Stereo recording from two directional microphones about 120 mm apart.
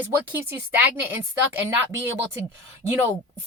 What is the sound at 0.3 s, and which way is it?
Speech, 15° right (ahead or behind).